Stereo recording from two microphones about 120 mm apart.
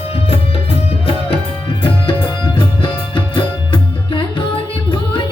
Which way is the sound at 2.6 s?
40° left (ahead or behind).